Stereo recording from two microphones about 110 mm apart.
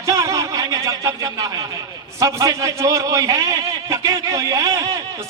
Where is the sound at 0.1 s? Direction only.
30° right (ahead or behind).